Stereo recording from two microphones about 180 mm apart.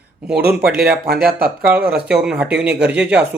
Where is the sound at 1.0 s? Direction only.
55° right (ahead or behind).